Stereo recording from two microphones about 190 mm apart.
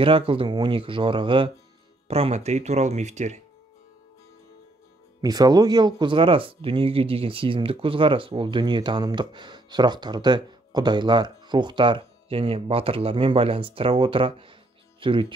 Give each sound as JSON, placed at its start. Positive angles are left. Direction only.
{"t": 0.0, "sound": "speech", "side_deg": -30}
{"t": 5.2, "sound": "speech", "side_deg": -20}